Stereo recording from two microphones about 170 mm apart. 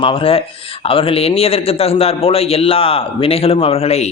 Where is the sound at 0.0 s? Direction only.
30° left (ahead or behind).